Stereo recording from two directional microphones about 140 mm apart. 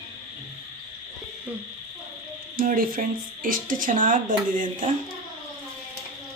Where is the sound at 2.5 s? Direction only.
90° right; by 4.8 s 70° right (ahead or behind).